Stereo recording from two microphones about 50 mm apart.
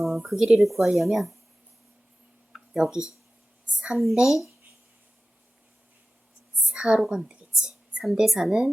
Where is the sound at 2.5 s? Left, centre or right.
Centre.